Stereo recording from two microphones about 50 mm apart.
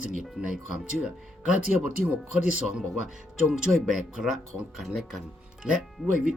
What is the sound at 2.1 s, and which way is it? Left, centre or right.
Speech, centre.